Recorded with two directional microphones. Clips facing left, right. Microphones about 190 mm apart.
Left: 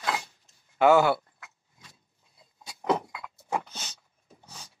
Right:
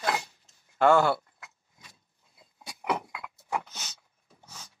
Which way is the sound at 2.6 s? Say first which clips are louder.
Left 1 dB; 15° right (ahead or behind).